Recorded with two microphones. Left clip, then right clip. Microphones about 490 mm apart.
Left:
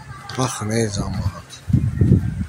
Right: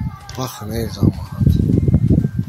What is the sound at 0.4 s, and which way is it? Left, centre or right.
Speech, right.